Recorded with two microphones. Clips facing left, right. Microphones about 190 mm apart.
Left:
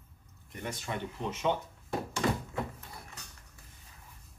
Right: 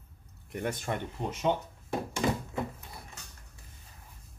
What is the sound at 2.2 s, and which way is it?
Thunk, 15° right (ahead or behind).